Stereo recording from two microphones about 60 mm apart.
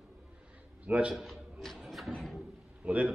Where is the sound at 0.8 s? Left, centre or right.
Right.